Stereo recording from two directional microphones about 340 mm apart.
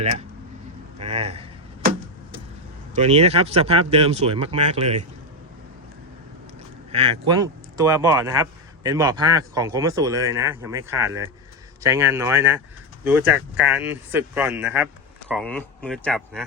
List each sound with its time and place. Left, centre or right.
0.9 s arrow: centre
2.9 s speech: centre
6.9 s speech: centre